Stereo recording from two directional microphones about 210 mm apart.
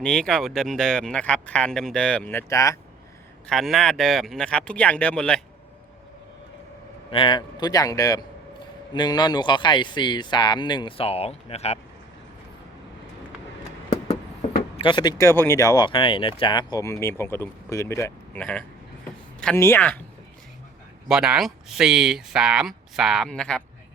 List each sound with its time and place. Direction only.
0.0 s speech: 5° left (ahead or behind)
3.5 s speech: centre (ahead or behind)
7.1 s speech: 25° left (ahead or behind)
14.8 s speech: 20° left (ahead or behind)
21.1 s speech: 5° right (ahead or behind)